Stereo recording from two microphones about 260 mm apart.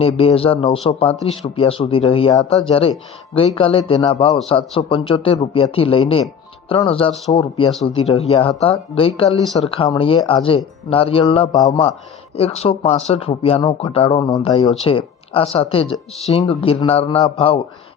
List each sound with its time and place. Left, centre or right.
0.0 s speech: left